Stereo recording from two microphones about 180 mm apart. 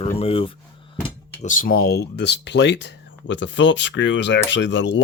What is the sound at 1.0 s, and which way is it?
Speech, 40° left (ahead or behind).